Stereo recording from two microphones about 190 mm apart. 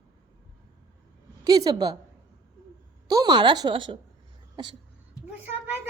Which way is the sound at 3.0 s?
20° right (ahead or behind).